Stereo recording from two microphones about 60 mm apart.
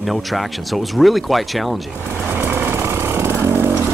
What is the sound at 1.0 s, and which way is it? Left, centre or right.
Speech, centre.